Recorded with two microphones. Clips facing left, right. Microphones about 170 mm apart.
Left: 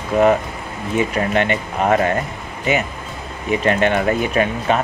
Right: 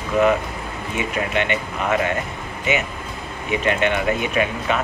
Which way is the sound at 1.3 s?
40° left (ahead or behind).